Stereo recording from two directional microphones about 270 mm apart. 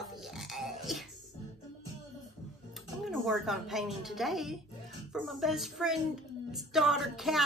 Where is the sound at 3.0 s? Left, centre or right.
Centre.